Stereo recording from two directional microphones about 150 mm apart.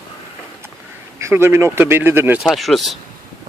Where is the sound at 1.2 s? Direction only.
15° right (ahead or behind).